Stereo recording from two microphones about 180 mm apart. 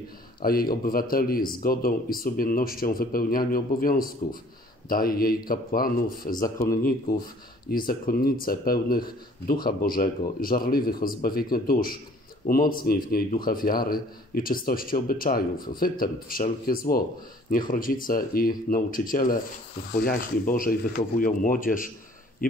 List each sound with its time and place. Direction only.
0.4 s a man's voice: 55° left (ahead or behind)
6.4 s a man's voice: 15° left (ahead or behind)
7.7 s a man's voice: 50° left (ahead or behind)